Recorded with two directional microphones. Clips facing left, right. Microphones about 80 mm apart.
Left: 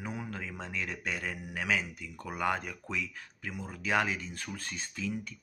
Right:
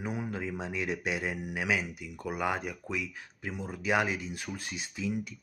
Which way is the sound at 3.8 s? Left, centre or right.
Centre.